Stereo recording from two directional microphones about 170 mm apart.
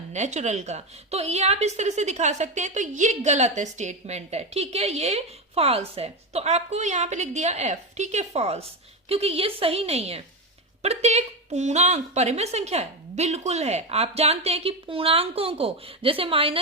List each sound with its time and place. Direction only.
0.1 s a woman's voice: 40° right (ahead or behind)